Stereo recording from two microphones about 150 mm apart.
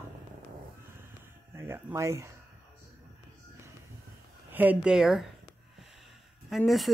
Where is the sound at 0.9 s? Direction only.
15° right (ahead or behind).